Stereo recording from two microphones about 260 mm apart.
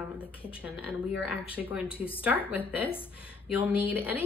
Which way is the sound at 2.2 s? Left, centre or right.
Centre.